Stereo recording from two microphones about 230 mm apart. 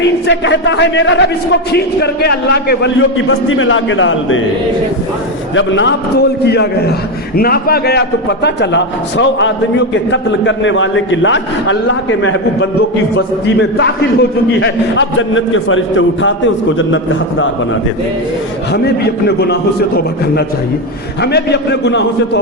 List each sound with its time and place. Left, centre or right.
0.3 s a man's voice: left
5.5 s a man's voice: left
21.2 s a man's voice: left